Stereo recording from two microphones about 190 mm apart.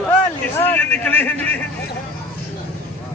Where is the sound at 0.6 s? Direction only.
10° left (ahead or behind).